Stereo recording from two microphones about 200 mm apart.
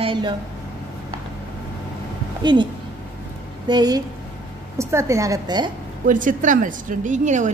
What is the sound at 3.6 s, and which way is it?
A woman's voice, 20° right (ahead or behind).